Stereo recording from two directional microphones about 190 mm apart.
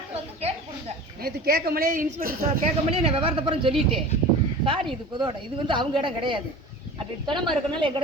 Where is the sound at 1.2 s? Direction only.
55° right (ahead or behind).